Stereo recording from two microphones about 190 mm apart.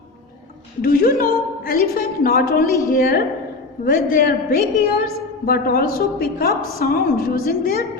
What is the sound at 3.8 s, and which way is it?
A woman's voice, 50° left (ahead or behind).